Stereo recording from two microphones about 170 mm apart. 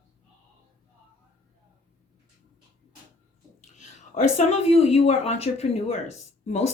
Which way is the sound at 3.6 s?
45° left (ahead or behind).